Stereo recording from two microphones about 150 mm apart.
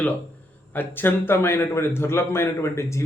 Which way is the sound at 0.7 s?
15° left (ahead or behind).